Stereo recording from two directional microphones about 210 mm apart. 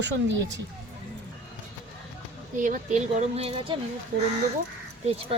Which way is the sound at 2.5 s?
40° right (ahead or behind).